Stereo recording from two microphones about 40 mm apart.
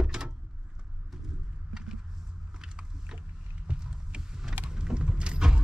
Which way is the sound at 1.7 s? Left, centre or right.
Centre.